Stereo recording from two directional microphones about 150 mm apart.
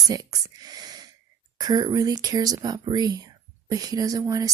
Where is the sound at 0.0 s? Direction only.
25° right (ahead or behind).